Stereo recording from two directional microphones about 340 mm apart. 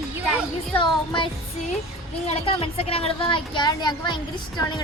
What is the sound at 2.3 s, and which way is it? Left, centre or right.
Speech, centre.